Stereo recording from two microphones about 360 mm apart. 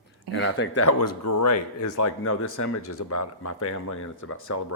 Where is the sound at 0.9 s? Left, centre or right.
Left.